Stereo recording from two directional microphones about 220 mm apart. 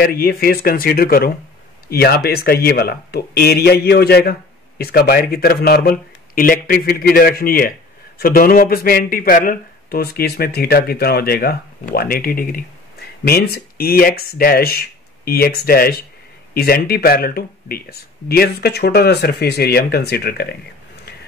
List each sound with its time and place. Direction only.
0.0 s speech: 45° left (ahead or behind)